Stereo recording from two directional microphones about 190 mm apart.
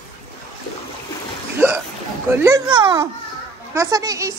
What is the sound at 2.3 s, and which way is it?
A woman's voice, 15° right (ahead or behind).